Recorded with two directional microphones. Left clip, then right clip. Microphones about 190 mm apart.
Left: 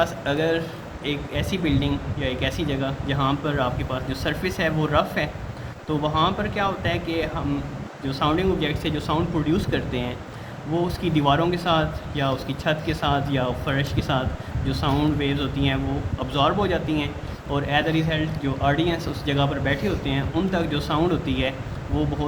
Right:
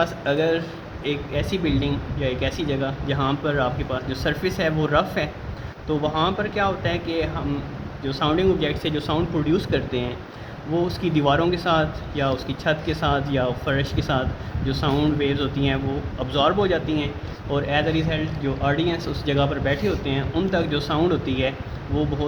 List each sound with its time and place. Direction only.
0.0 s speech: 15° right (ahead or behind)